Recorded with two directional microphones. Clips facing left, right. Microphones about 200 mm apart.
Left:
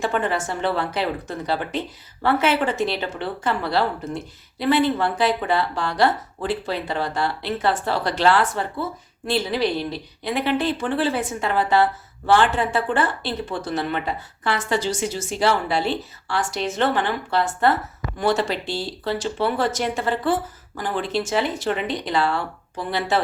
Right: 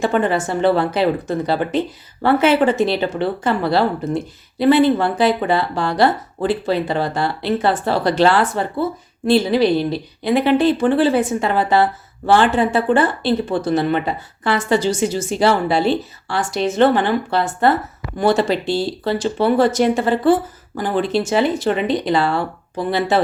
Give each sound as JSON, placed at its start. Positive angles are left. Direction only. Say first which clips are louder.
{"t": 0.0, "sound": "speech", "louder": "right 6 dB", "side_deg": -30}
{"t": 2.2, "sound": "speech", "louder": "right 6 dB", "side_deg": -30}